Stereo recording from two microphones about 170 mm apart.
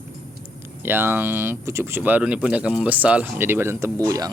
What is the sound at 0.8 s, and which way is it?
Speech, 15° right (ahead or behind).